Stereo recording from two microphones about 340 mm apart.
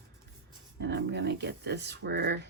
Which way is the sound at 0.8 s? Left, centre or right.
Right.